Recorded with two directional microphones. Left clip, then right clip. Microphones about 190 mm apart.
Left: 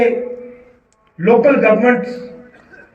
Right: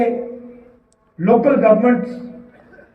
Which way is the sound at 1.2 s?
65° right (ahead or behind).